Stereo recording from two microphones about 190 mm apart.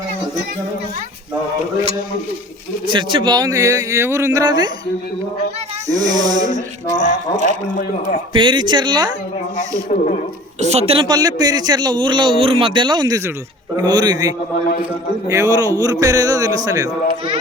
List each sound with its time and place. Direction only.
2.8 s a man's voice: 25° right (ahead or behind)
5.9 s a man's voice: 20° right (ahead or behind)
8.3 s a man's voice: 25° right (ahead or behind)
9.6 s speech: 40° left (ahead or behind)
10.6 s a man's voice: 35° right (ahead or behind); by 17.3 s 20° right (ahead or behind)